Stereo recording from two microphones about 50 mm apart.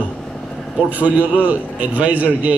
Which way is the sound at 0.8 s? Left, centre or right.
Right.